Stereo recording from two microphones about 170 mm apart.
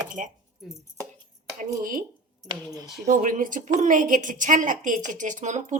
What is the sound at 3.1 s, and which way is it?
Speech, 50° right (ahead or behind).